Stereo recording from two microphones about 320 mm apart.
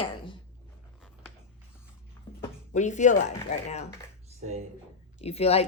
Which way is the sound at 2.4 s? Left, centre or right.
Left.